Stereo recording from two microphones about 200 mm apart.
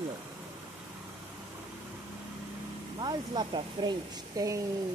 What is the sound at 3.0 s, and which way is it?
Speech, 20° right (ahead or behind).